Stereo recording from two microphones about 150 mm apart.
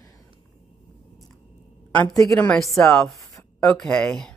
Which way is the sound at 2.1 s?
20° left (ahead or behind).